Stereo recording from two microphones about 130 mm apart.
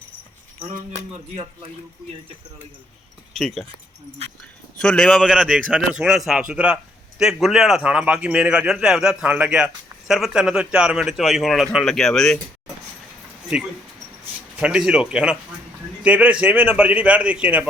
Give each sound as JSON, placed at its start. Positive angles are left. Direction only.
{"t": 0.9, "sound": "speech", "side_deg": -50}
{"t": 3.3, "sound": "a man's voice", "side_deg": 0}
{"t": 4.8, "sound": "a man's voice", "side_deg": 5}
{"t": 13.5, "sound": "a man's voice", "side_deg": -5}